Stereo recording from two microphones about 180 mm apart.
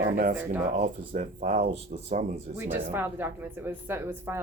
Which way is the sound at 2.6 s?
10° right (ahead or behind).